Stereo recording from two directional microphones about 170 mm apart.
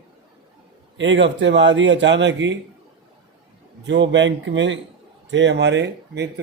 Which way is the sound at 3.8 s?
90° right.